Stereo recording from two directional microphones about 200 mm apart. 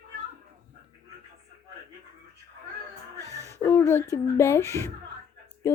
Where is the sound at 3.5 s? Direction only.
10° left (ahead or behind).